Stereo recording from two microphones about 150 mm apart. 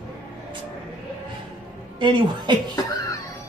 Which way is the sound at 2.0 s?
30° right (ahead or behind).